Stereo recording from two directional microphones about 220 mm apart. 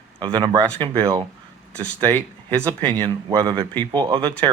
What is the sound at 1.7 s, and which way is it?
Speech, 5° left (ahead or behind).